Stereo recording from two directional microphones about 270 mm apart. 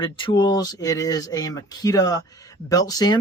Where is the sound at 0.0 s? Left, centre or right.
Centre.